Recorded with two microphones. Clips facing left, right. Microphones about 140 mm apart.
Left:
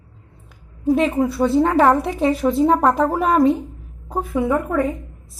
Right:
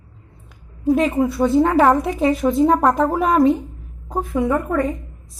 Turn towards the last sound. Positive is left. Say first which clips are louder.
# even
turn(degrees=5)  # may be behind; listen again after turning